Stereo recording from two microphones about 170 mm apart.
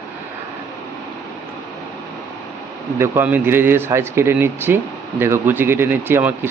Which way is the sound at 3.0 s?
10° right (ahead or behind).